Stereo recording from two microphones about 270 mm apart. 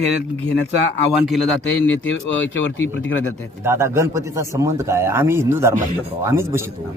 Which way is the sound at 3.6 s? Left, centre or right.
Centre.